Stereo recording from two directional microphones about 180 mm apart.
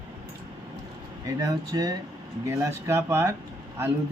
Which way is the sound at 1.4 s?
20° right (ahead or behind).